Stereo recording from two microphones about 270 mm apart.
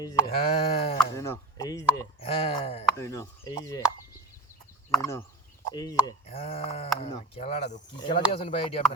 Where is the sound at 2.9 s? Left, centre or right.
Centre.